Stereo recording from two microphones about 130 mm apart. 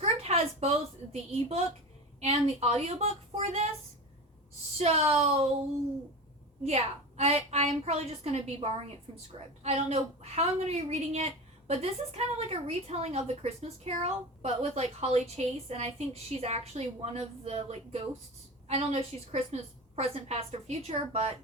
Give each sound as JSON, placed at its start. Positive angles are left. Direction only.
{"t": 0.0, "sound": "a sound", "side_deg": -55}
{"t": 1.1, "sound": "speech", "side_deg": -55}
{"t": 4.8, "sound": "speech", "side_deg": -55}
{"t": 6.7, "sound": "a woman's voice", "side_deg": -55}